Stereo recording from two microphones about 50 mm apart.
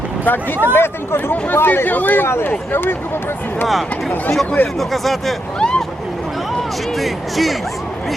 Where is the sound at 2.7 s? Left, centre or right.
Left.